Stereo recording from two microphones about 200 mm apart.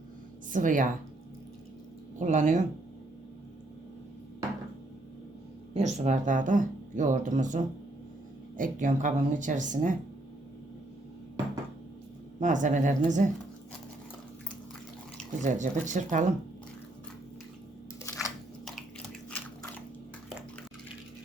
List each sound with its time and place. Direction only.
0.5 s speech: 40° right (ahead or behind)
2.1 s speech: 40° right (ahead or behind)
5.7 s speech: 35° right (ahead or behind)
12.4 s speech: 40° right (ahead or behind)
15.4 s speech: 35° right (ahead or behind)
18.6 s a sound: 5° left (ahead or behind)